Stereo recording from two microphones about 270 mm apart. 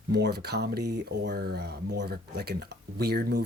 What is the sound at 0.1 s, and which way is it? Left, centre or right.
Speech, right.